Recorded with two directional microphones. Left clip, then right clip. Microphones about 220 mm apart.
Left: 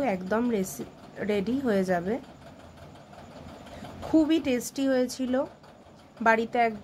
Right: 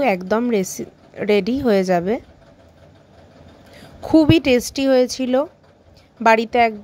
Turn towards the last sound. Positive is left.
turn(degrees=-30)  # may be behind; listen again after turning